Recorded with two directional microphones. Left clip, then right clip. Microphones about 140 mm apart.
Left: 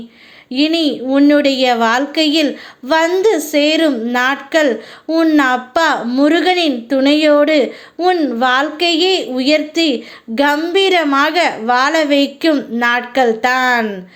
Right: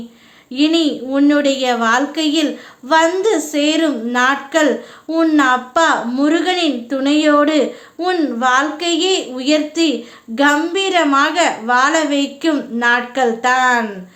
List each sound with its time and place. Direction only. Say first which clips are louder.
0.5 s a woman's voice: even; 35° left (ahead or behind)